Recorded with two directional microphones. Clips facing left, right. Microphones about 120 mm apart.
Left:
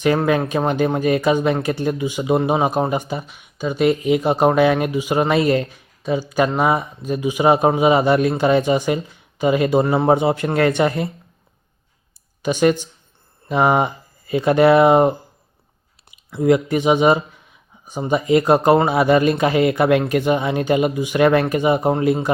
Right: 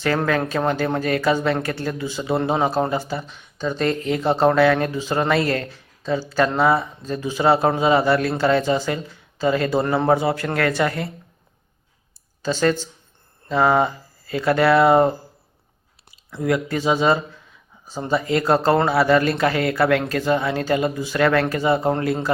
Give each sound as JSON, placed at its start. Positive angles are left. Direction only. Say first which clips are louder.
{"t": 0.3, "sound": "speech", "louder": "left 2 dB", "side_deg": 20}
{"t": 12.4, "sound": "speech", "louder": "left 3 dB", "side_deg": 15}